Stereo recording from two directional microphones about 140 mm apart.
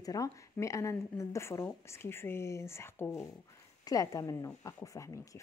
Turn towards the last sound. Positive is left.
turn(degrees=25)  # may be behind; listen again after turning